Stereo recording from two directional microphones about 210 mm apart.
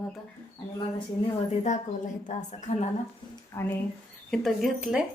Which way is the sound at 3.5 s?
15° left (ahead or behind).